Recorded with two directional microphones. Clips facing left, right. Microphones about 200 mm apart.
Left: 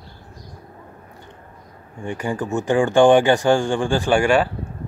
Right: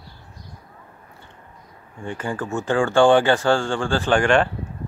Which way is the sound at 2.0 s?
15° left (ahead or behind).